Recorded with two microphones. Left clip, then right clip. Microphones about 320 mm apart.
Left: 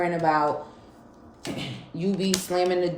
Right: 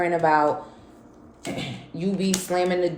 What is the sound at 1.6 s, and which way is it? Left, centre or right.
A woman's voice, centre.